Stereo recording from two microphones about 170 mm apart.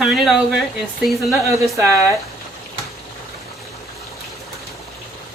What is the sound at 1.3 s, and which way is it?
Speech, 20° right (ahead or behind).